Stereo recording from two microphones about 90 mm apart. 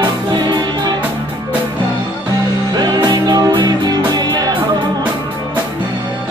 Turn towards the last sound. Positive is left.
turn(degrees=-50)  # may be behind; listen again after turning